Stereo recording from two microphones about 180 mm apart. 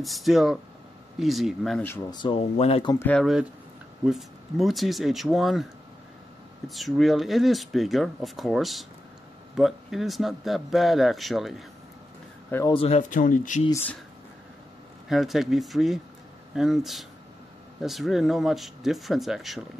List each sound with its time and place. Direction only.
0.0 s speech: centre (ahead or behind)
1.9 s speech: 25° left (ahead or behind)
2.9 s speech: 15° left (ahead or behind)
3.2 s speech: centre (ahead or behind)
6.7 s speech: centre (ahead or behind)
12.4 s speech: 15° left (ahead or behind)
12.7 s speech: 35° left (ahead or behind)
15.0 s speech: centre (ahead or behind)